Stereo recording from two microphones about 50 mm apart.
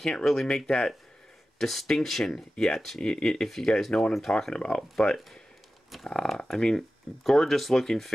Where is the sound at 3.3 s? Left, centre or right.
Centre.